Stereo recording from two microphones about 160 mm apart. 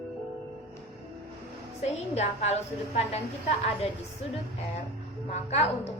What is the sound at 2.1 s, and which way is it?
A woman's voice, 45° left (ahead or behind).